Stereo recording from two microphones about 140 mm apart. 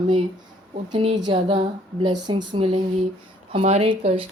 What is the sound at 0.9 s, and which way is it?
A woman's voice, 45° right (ahead or behind).